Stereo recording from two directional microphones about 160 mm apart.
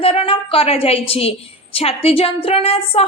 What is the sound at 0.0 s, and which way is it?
A woman's voice, 35° left (ahead or behind).